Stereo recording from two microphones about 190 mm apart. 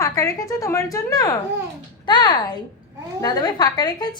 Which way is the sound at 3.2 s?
20° left (ahead or behind).